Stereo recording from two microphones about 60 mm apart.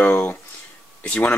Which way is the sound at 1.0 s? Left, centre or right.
Centre.